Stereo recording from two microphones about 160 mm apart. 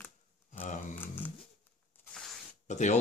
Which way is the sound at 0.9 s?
10° left (ahead or behind).